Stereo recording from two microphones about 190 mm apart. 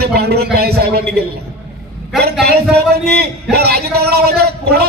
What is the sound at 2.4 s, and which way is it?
A man's voice, 55° right (ahead or behind).